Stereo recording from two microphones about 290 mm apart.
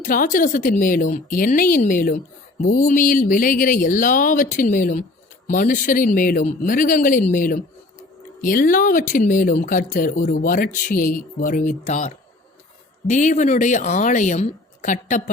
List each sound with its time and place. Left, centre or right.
0.0 s speech: left